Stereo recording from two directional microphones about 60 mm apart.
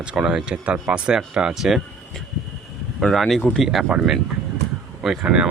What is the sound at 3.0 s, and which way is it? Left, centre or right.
Speech, centre.